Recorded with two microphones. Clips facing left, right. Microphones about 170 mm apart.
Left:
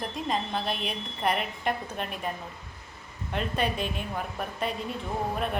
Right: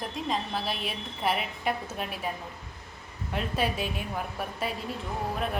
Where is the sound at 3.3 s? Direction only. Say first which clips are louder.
Left 1 dB; 5° right (ahead or behind).